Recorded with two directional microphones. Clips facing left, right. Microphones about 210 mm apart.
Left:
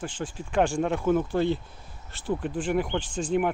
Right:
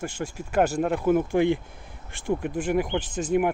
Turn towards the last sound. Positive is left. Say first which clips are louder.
# right 2 dB
turn(degrees=-10)  # may be behind; listen again after turning